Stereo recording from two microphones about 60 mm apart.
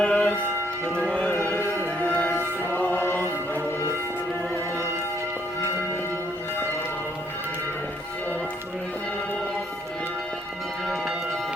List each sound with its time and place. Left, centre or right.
0.0 s music: left
2.0 s music: left